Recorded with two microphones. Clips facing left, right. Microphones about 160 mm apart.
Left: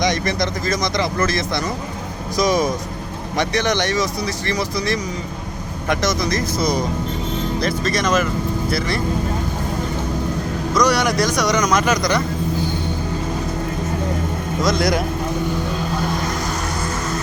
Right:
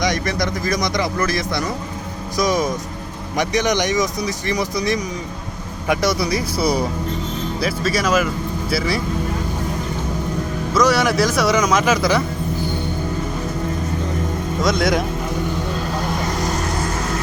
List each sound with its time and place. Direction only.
0.6 s speech: 15° right (ahead or behind)
2.4 s speech: 15° left (ahead or behind)
3.3 s speech: 15° right (ahead or behind)
10.8 s speech: centre (ahead or behind)
14.6 s speech: centre (ahead or behind)